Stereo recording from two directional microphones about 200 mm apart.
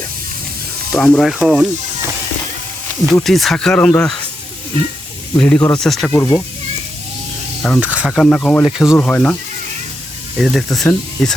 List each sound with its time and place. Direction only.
0.9 s speech: 5° left (ahead or behind)
3.1 s speech: centre (ahead or behind)
5.4 s speech: 5° left (ahead or behind)
6.1 s speech: 15° left (ahead or behind)
7.6 s speech: 5° right (ahead or behind)